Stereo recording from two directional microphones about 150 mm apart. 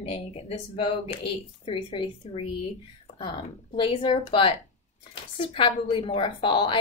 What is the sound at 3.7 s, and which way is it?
A woman's voice, 35° left (ahead or behind).